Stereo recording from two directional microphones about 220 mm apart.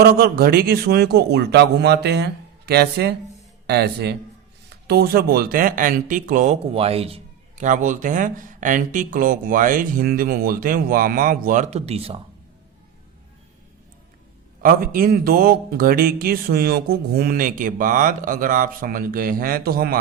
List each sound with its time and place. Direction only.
0.0 s speech: 45° right (ahead or behind); by 12.2 s 25° right (ahead or behind)
14.6 s speech: 40° right (ahead or behind)